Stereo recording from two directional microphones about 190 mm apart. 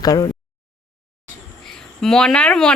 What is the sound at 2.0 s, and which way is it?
Speech, 5° left (ahead or behind).